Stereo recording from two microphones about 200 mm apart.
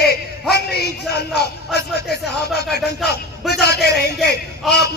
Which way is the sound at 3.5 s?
55° left (ahead or behind).